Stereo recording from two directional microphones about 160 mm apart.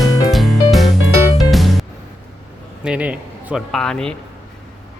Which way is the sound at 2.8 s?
5° right (ahead or behind).